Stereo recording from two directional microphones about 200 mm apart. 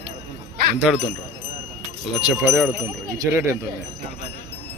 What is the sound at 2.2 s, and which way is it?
Speech, 5° right (ahead or behind).